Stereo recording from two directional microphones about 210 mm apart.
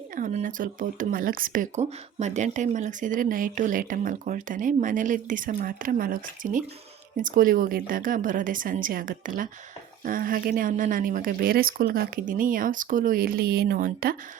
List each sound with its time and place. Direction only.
0.2 s speech: 40° right (ahead or behind)